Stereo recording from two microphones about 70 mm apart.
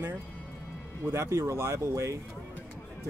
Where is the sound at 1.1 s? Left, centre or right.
Right.